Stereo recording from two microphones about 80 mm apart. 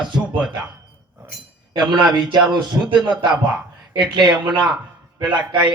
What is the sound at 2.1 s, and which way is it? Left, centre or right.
Speech, right.